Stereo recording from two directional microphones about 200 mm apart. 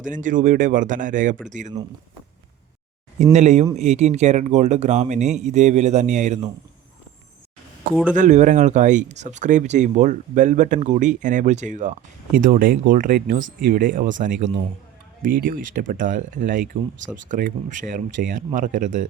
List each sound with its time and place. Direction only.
0.0 s speech: 40° right (ahead or behind)
3.3 s speech: 35° right (ahead or behind)
8.1 s speech: 40° right (ahead or behind)